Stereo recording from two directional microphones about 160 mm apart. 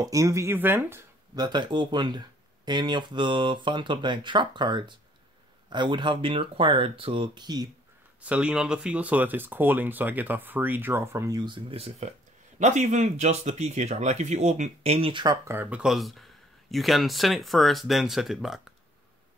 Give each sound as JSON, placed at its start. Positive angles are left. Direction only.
{"t": 0.0, "sound": "speech", "side_deg": -20}
{"t": 8.2, "sound": "speech", "side_deg": -5}
{"t": 15.4, "sound": "speech", "side_deg": -15}